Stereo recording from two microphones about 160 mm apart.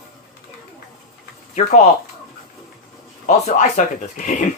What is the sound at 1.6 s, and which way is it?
Speech, 45° left (ahead or behind).